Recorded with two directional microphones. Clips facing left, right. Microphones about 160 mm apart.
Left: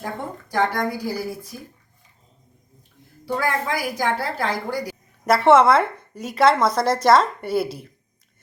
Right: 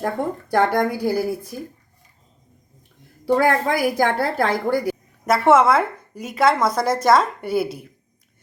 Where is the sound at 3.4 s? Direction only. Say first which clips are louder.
Right 4 dB; 55° right (ahead or behind).